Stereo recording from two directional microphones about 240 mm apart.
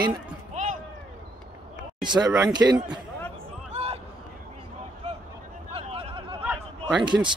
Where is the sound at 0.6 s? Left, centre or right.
Right.